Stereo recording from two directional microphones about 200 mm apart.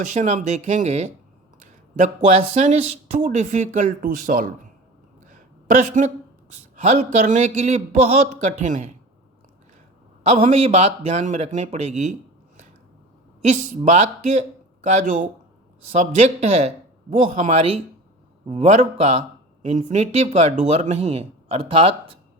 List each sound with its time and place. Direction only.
0.1 s speech: 35° right (ahead or behind)
5.3 s a sound: 40° right (ahead or behind)
6.7 s speech: 35° right (ahead or behind)
10.2 s speech: 35° right (ahead or behind)
13.5 s speech: 35° right (ahead or behind)
15.9 s speech: 35° right (ahead or behind)